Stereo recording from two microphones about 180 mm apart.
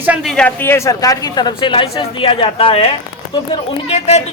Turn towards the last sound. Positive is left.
turn(degrees=35)  # may be behind; listen again after turning